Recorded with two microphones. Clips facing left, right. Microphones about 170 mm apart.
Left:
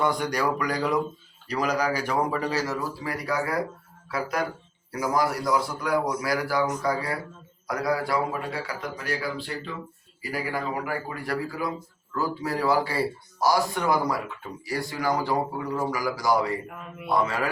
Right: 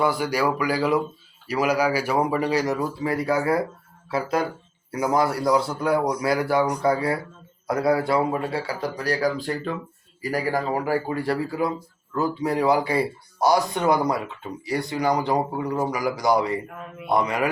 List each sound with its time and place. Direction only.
0.0 s speech: 5° right (ahead or behind)